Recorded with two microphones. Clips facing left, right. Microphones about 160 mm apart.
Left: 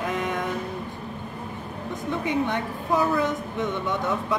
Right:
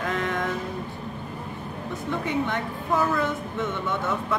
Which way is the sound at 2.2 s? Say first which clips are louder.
Left 2 dB; 15° left (ahead or behind).